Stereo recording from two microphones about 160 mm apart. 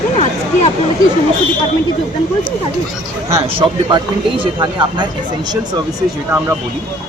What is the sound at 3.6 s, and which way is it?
Speech, 30° right (ahead or behind).